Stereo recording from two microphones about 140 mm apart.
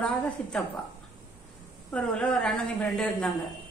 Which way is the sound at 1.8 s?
5° left (ahead or behind).